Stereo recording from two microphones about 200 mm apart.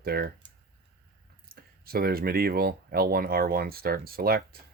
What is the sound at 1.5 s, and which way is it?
Speech, 50° right (ahead or behind).